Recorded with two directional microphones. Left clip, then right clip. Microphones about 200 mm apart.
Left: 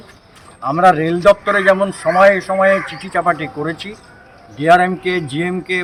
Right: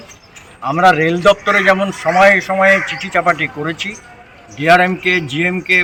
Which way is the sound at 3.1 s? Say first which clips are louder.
Right 2 dB; 10° left (ahead or behind).